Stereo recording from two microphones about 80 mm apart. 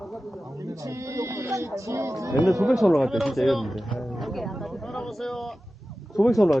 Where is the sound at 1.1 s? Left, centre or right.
Right.